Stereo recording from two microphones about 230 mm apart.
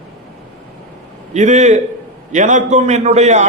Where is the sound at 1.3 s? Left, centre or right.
Right.